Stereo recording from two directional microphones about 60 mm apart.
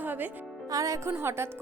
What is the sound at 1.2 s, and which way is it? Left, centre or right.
Speech, right.